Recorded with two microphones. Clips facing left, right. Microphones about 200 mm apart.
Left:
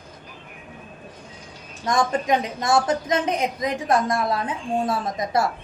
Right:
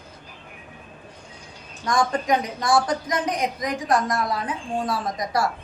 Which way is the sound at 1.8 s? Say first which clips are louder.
Left 1 dB; 25° left (ahead or behind).